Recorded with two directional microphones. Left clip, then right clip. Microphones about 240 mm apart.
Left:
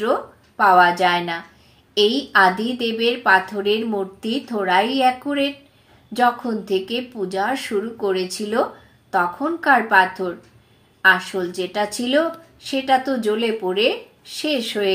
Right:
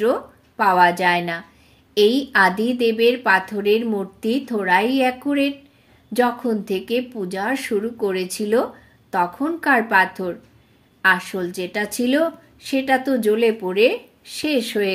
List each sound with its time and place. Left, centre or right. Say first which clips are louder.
0.0 s a woman's voice: right 1 dB; right